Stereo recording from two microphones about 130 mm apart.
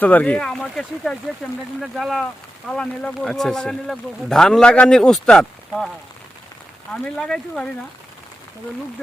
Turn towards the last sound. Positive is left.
turn(degrees=5)  # may be behind; listen again after turning